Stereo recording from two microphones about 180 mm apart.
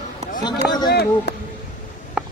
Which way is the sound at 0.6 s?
5° right (ahead or behind).